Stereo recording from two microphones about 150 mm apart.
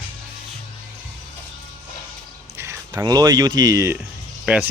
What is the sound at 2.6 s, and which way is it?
Speech, 20° right (ahead or behind).